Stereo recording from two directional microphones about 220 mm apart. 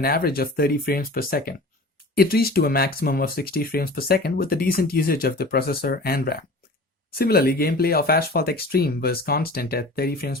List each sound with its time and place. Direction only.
0.0 s speech: 45° left (ahead or behind)